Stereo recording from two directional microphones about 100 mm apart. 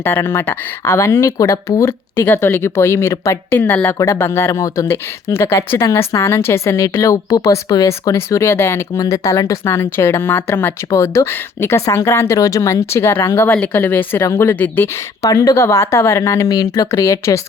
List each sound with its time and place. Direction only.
0.0 s speech: 25° left (ahead or behind)
15.2 s a woman's voice: 35° left (ahead or behind)